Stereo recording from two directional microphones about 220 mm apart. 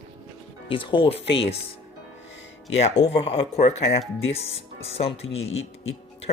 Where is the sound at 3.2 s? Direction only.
30° left (ahead or behind).